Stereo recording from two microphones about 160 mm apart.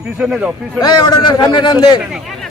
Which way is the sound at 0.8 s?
25° left (ahead or behind).